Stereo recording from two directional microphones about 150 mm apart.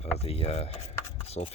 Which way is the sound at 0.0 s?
40° left (ahead or behind).